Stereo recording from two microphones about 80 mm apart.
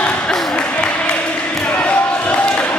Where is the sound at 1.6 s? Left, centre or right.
Centre.